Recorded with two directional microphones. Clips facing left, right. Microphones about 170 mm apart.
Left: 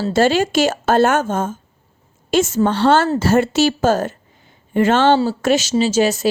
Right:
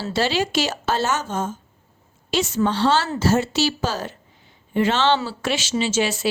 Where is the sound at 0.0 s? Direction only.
50° left (ahead or behind).